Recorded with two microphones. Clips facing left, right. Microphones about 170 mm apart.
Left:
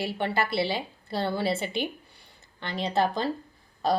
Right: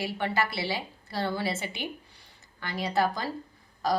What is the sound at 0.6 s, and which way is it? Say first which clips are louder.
Speech: left 3 dB; 20° left (ahead or behind).